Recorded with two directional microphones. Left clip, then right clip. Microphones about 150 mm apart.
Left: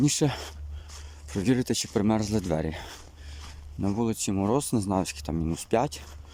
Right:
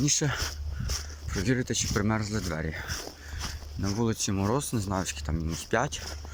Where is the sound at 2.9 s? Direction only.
90° right.